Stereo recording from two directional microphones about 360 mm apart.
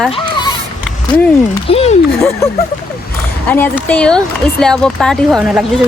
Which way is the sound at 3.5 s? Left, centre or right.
Centre.